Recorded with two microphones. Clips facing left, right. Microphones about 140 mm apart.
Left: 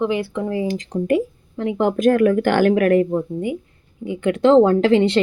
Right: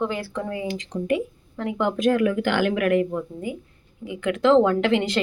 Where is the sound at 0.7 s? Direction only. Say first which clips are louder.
Left 3 dB; 45° left (ahead or behind).